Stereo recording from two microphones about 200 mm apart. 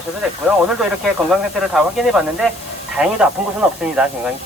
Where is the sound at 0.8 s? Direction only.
Centre (ahead or behind).